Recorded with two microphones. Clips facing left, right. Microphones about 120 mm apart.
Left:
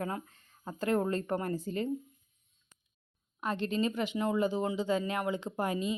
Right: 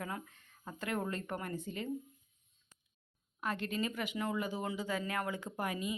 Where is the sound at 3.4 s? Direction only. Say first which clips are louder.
Left 5 dB; 25° left (ahead or behind).